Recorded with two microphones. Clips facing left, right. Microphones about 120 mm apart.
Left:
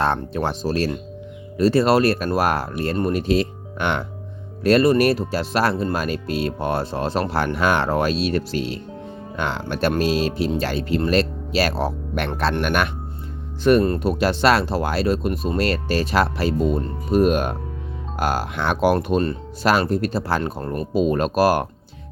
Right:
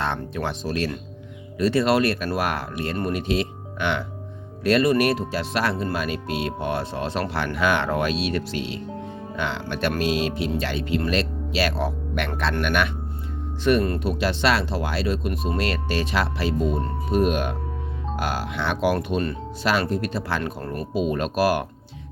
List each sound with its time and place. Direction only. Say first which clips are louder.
0.0 s speech: left 5 dB; 40° left (ahead or behind)
21.0 s speech: left 4 dB; 40° left (ahead or behind)